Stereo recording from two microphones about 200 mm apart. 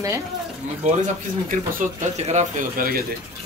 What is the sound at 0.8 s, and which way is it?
Speech, 40° right (ahead or behind).